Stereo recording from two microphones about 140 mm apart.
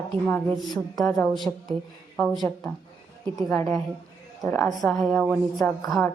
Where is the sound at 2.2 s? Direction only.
Centre (ahead or behind).